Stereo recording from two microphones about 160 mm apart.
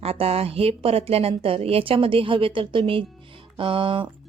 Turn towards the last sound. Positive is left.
turn(degrees=-30)  # may be behind; listen again after turning